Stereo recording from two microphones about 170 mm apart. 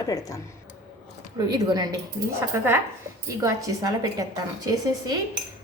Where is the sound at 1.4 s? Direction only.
25° right (ahead or behind).